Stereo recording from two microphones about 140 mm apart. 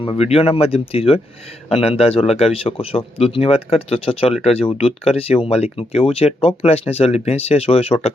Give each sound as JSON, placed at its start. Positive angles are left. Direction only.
{"t": 0.2, "sound": "speech", "side_deg": 45}